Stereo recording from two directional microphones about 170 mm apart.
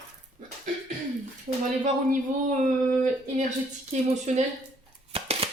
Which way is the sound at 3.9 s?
45° right (ahead or behind).